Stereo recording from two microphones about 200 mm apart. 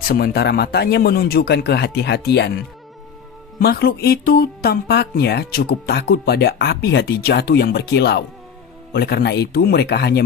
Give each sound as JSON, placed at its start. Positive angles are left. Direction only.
{"t": 0.1, "sound": "speech", "side_deg": 50}